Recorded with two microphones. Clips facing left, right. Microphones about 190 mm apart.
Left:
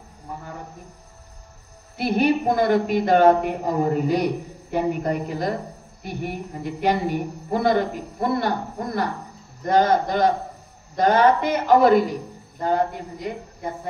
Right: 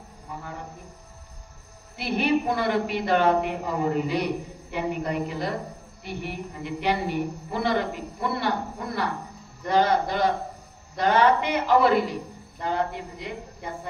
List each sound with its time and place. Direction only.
2.0 s a woman's voice: 45° left (ahead or behind)